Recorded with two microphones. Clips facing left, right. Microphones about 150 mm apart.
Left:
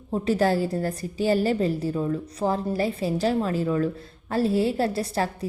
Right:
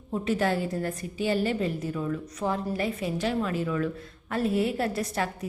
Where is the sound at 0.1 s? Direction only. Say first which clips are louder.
Left 4 dB; 35° left (ahead or behind).